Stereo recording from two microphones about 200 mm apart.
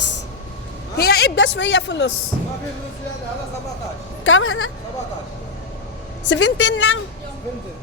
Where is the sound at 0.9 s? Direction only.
50° left (ahead or behind).